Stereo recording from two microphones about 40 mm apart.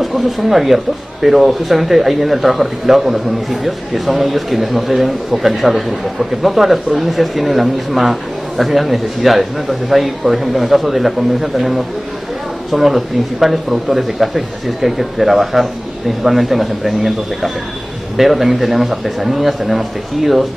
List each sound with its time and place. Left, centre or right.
0.0 s speech: centre